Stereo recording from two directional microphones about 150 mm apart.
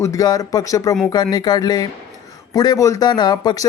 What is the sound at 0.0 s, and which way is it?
Speech, 20° left (ahead or behind).